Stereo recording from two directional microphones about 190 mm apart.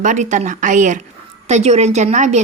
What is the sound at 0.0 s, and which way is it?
A woman's voice, 40° right (ahead or behind).